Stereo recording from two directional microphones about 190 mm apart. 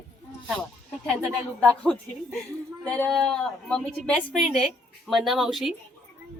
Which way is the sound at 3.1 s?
5° left (ahead or behind).